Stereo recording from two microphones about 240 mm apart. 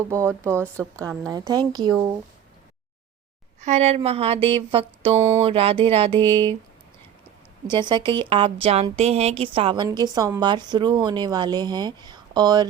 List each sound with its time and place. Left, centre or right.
0.1 s speech: centre
3.6 s speech: right
5.1 s speech: centre
5.4 s speech: right
7.7 s speech: centre